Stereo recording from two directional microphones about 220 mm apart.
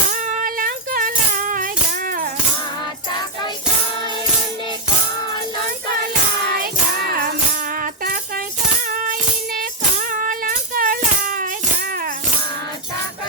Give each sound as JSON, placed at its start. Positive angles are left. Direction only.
{"t": 0.1, "sound": "music", "side_deg": -35}
{"t": 7.8, "sound": "music", "side_deg": -40}
{"t": 10.1, "sound": "a sound", "side_deg": -40}